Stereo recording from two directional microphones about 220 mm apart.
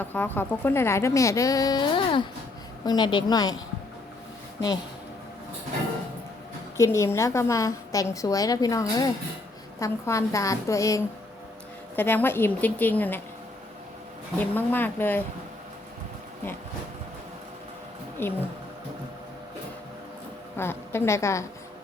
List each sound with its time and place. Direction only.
0.0 s a woman's voice: 10° left (ahead or behind)
6.7 s a woman's voice: 15° left (ahead or behind)
14.3 s a woman's voice: 10° left (ahead or behind)
18.2 s speech: 10° left (ahead or behind)
20.6 s a woman's voice: 10° left (ahead or behind)